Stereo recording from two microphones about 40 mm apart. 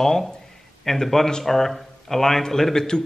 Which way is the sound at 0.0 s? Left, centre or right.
Centre.